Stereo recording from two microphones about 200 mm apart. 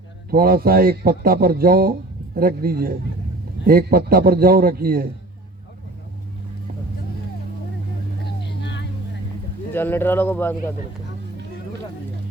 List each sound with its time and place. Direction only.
0.3 s speech: 45° right (ahead or behind)
8.2 s vehicle: 60° left (ahead or behind)
9.7 s speech: 10° left (ahead or behind)